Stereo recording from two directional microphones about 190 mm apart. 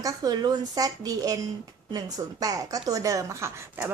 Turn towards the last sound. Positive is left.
turn(degrees=-15)  # may be behind; listen again after turning